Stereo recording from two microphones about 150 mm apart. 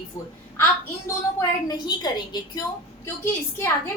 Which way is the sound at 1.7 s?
30° left (ahead or behind).